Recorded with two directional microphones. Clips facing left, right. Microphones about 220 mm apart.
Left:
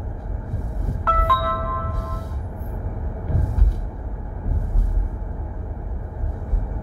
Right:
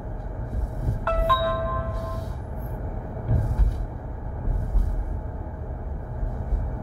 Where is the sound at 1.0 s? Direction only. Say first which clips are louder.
Right 1 dB; 30° right (ahead or behind).